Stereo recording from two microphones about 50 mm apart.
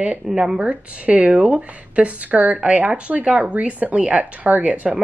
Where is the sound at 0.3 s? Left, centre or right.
Centre.